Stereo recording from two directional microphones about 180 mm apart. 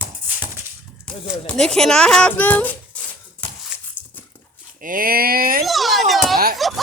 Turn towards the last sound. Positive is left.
turn(degrees=0)  # may be behind; listen again after turning